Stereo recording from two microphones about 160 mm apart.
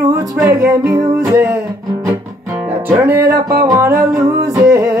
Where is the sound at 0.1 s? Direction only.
20° right (ahead or behind).